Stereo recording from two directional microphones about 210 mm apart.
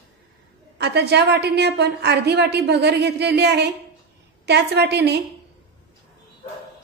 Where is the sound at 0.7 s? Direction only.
50° right (ahead or behind).